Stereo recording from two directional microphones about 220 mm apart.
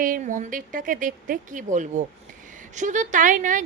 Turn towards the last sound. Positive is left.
turn(degrees=-35)  # may be behind; listen again after turning